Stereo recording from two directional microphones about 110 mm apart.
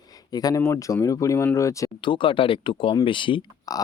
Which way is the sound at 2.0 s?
45° left (ahead or behind).